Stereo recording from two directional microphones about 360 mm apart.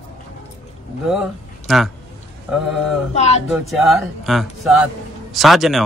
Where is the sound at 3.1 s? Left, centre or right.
Centre.